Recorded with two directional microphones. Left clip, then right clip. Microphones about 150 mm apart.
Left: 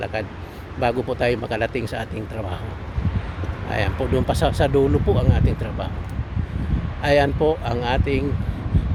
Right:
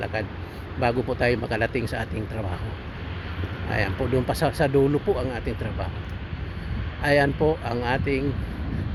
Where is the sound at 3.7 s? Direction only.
30° left (ahead or behind).